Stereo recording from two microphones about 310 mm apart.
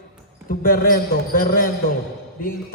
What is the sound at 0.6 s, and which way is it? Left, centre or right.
Music, left.